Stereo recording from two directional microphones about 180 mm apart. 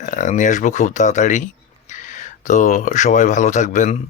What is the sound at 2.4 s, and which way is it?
Speech, 45° left (ahead or behind).